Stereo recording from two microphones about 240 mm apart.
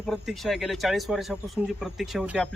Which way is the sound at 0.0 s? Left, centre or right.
Centre.